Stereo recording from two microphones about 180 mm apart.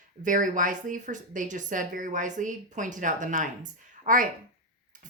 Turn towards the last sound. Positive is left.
turn(degrees=-50)  # may be behind; listen again after turning